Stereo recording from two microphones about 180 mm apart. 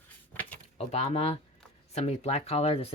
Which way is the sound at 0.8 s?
35° left (ahead or behind).